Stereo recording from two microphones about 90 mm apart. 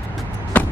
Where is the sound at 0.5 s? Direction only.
15° left (ahead or behind).